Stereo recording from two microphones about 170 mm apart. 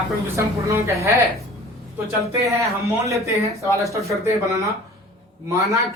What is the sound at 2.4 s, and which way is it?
A man's voice, 20° right (ahead or behind).